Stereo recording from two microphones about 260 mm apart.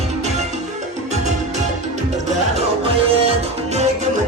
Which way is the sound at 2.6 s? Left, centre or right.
Right.